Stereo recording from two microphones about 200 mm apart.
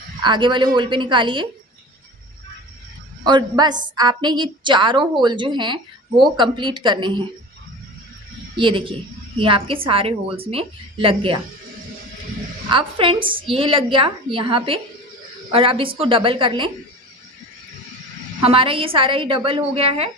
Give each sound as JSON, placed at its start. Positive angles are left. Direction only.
{"t": 0.2, "sound": "a woman's voice", "side_deg": -25}
{"t": 3.2, "sound": "a woman's voice", "side_deg": -20}
{"t": 8.5, "sound": "a woman's voice", "side_deg": -25}
{"t": 12.7, "sound": "a woman's voice", "side_deg": -25}
{"t": 18.3, "sound": "a woman's voice", "side_deg": -25}